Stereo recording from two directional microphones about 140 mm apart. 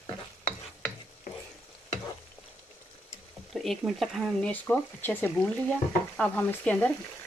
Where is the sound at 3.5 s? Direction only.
Centre (ahead or behind).